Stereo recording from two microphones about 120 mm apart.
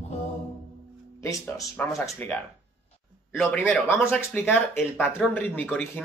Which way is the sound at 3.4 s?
10° left (ahead or behind).